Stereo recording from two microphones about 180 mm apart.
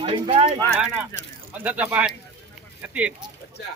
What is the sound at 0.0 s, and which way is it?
Speech, 30° right (ahead or behind).